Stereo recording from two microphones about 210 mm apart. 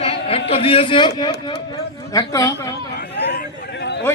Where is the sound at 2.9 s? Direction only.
50° left (ahead or behind).